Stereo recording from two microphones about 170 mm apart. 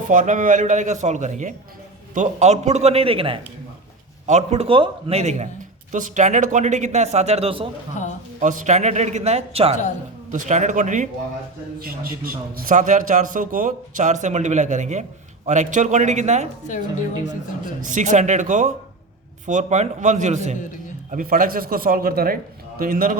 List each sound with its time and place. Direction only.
0.1 s a man's voice: 50° right (ahead or behind); by 7.7 s 35° right (ahead or behind)
8.4 s a man's voice: 50° right (ahead or behind)
10.3 s a man's voice: 45° right (ahead or behind)
11.8 s a man's voice: 60° right (ahead or behind); by 16.5 s 40° right (ahead or behind)
17.8 s a man's voice: 45° right (ahead or behind)
21.1 s speech: 55° right (ahead or behind)